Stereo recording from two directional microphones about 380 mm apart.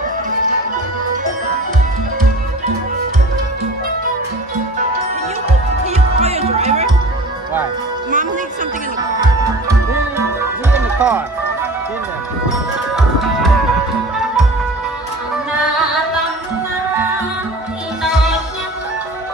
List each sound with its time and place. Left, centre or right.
5.9 s music: centre
9.2 s music: centre